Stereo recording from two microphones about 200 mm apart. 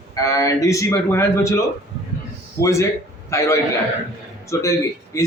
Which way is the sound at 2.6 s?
15° left (ahead or behind).